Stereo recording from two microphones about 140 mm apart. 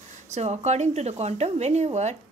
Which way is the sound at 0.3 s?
50° right (ahead or behind).